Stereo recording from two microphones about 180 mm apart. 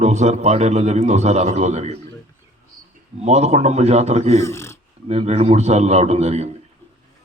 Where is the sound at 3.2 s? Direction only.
35° right (ahead or behind).